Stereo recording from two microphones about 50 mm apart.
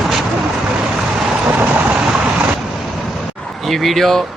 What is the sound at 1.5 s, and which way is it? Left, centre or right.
Vehicle, right.